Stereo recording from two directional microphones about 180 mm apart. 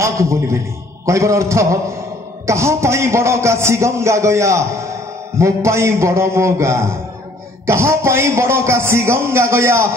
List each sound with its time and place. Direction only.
0.0 s a man's voice: 15° right (ahead or behind)